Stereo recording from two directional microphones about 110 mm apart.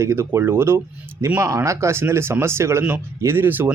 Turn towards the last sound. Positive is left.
turn(degrees=-20)  # may be behind; listen again after turning